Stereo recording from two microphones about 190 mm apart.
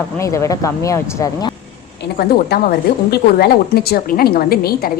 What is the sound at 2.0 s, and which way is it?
A woman's voice, 55° left (ahead or behind).